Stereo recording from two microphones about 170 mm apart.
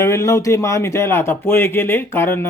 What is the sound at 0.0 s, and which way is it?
Speech, 15° left (ahead or behind).